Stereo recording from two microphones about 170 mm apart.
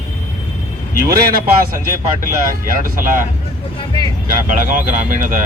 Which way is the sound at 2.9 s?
50° right (ahead or behind).